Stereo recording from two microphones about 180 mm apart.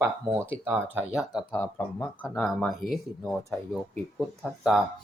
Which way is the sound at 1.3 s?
10° left (ahead or behind).